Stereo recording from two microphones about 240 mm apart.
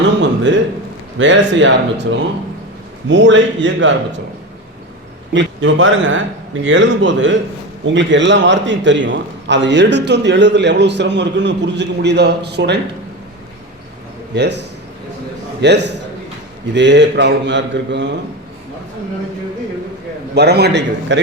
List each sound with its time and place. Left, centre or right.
0.2 s a sound: right
1.2 s a man's voice: right
5.3 s a man's voice: right
14.3 s a man's voice: right
15.6 s a man's voice: right
20.3 s a man's voice: right